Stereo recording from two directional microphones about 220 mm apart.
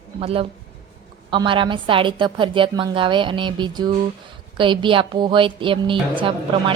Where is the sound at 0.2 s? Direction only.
25° right (ahead or behind).